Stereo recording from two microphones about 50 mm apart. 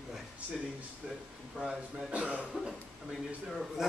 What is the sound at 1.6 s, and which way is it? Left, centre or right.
Speech, centre.